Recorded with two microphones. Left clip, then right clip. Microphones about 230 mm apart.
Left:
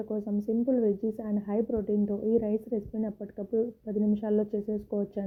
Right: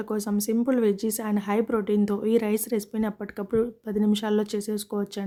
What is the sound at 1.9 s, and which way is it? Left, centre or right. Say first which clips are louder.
Speech: right 4 dB; right.